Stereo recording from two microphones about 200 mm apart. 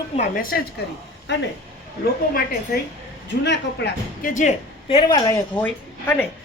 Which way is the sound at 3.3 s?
60° left (ahead or behind).